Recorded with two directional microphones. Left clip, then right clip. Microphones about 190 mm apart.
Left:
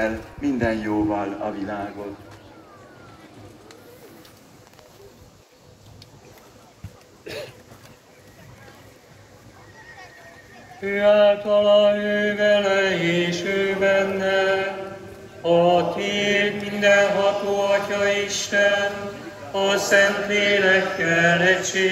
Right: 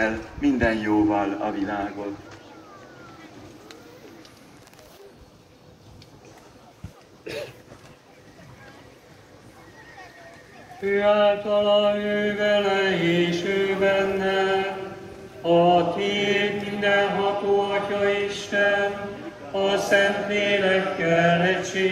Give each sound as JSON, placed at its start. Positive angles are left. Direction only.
{"t": 0.0, "sound": "mantra", "side_deg": 25}
{"t": 7.2, "sound": "a sound", "side_deg": 20}
{"t": 10.8, "sound": "mantra", "side_deg": 30}